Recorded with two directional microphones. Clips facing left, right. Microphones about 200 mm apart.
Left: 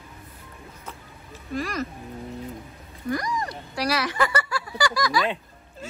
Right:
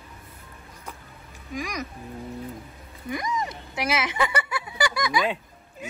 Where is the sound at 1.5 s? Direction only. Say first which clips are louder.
Left 3 dB; 15° right (ahead or behind).